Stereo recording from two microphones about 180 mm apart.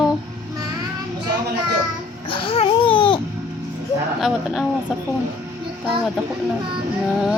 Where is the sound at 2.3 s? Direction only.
30° left (ahead or behind).